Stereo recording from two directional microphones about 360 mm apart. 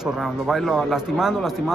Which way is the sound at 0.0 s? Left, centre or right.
Centre.